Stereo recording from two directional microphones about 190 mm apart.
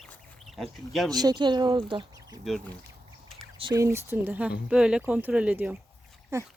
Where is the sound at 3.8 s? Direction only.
15° right (ahead or behind).